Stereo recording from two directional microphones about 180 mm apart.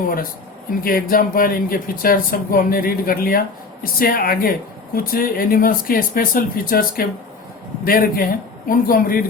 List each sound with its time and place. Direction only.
0.8 s speech: 55° left (ahead or behind)